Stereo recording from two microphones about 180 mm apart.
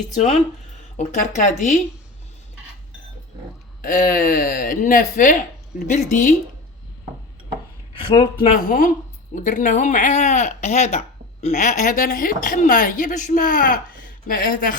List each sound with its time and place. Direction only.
0.1 s speech: 40° left (ahead or behind)
3.8 s speech: 50° left (ahead or behind)
7.9 s speech: 30° left (ahead or behind)
8.5 s speech: 50° left (ahead or behind)